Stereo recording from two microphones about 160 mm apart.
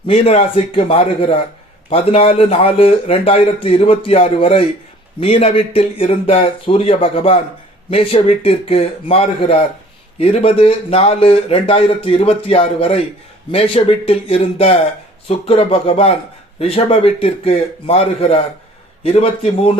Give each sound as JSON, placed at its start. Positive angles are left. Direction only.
{"t": 0.1, "sound": "a man's voice", "side_deg": 40}